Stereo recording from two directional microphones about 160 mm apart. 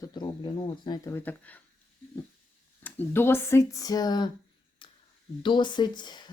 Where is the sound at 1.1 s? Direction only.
10° left (ahead or behind).